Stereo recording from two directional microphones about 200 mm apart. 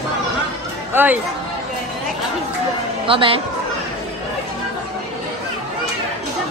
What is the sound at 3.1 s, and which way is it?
Speech, 25° right (ahead or behind).